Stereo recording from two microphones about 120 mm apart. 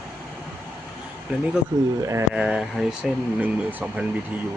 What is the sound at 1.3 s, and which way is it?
Speech, 5° right (ahead or behind).